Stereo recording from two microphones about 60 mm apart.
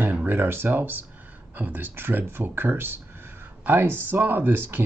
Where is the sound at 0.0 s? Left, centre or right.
Right.